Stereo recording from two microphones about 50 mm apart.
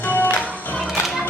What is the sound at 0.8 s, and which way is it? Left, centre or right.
Music, centre.